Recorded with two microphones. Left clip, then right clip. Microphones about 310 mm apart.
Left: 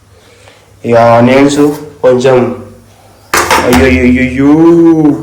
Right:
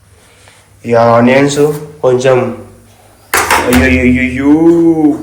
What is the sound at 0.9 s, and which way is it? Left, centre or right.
A man's voice, centre.